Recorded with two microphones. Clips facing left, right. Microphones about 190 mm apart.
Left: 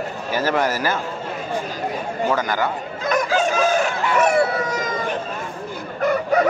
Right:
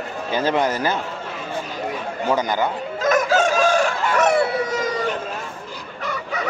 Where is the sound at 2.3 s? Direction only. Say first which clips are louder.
Right 2 dB; 20° right (ahead or behind).